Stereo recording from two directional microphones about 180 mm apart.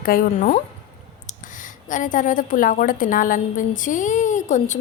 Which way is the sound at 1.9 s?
45° left (ahead or behind).